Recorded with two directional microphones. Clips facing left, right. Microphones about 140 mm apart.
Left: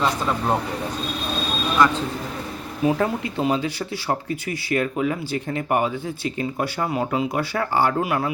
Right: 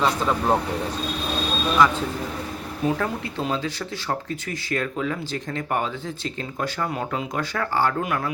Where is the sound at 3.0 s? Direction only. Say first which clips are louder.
Left 4 dB; 15° left (ahead or behind).